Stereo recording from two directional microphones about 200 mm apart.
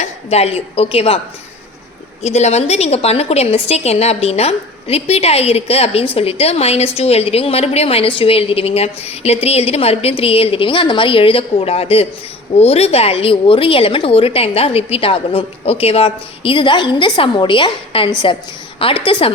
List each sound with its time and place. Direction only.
0.0 s a woman's voice: 30° left (ahead or behind)
2.2 s a woman's voice: 30° left (ahead or behind)